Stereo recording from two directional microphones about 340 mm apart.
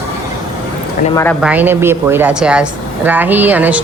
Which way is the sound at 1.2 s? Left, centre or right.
Centre.